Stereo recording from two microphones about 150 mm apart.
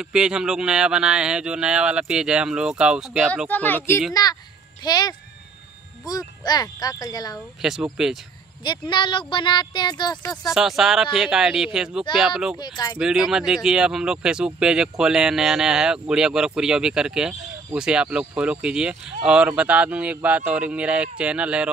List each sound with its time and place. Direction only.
0.0 s speech: 5° right (ahead or behind)
3.4 s speech: 10° left (ahead or behind)
4.1 s speech: 25° left (ahead or behind)
7.6 s speech: 5° right (ahead or behind)
8.6 s speech: 30° left (ahead or behind)
10.5 s speech: 5° right (ahead or behind)
12.5 s speech: 30° left (ahead or behind)
12.9 s speech: 5° right (ahead or behind)